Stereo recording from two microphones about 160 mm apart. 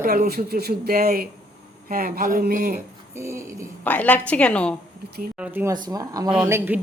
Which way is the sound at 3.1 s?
15° right (ahead or behind).